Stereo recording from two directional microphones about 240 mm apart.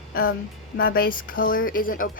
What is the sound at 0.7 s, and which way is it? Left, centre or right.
Speech, left.